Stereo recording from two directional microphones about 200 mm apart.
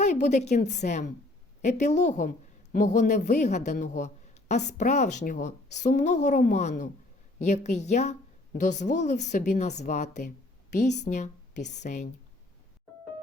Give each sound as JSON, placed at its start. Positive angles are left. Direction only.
{"t": 0.0, "sound": "a man's voice", "side_deg": 35}